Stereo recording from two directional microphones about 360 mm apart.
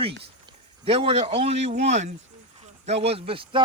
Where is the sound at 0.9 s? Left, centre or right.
Centre.